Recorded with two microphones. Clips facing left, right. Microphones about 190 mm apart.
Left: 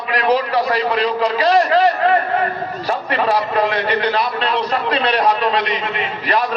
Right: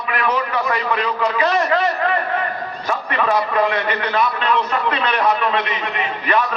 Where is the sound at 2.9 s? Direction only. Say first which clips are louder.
Left 1 dB; 35° left (ahead or behind).